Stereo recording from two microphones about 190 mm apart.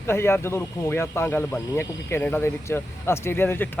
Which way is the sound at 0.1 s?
15° left (ahead or behind).